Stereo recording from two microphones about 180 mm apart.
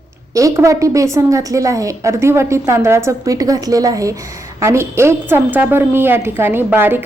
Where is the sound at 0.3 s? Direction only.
15° right (ahead or behind).